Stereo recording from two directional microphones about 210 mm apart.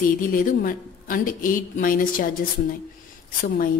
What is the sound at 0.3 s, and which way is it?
A woman's voice, 40° left (ahead or behind).